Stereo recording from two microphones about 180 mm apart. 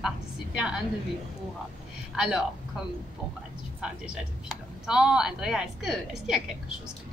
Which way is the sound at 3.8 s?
5° right (ahead or behind).